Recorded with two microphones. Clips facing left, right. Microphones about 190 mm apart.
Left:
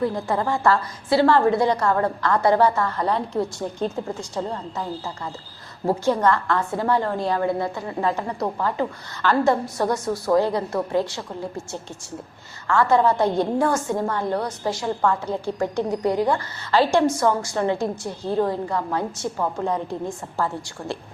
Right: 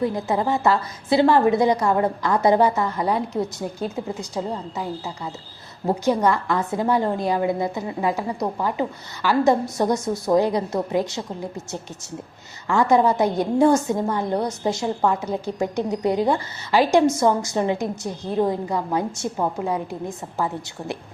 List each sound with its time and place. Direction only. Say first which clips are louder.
0.0 s a woman's voice: right 1 dB; 20° right (ahead or behind)